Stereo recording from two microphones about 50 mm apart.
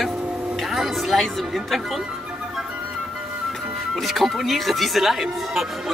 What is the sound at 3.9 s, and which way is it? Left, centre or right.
Speech, centre.